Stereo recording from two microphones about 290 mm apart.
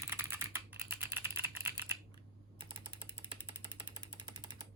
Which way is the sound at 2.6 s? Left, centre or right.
Centre.